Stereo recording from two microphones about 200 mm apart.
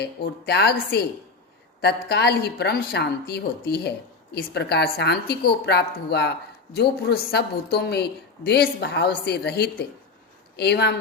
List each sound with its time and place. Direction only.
0.0 s a woman's voice: 55° left (ahead or behind)